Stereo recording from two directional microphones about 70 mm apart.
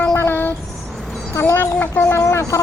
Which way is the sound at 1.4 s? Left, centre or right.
Left.